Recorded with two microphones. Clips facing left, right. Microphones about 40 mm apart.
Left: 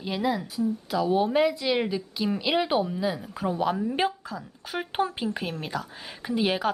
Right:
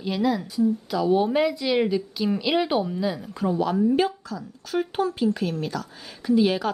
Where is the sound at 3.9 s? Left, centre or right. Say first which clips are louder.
Right 4 dB; left.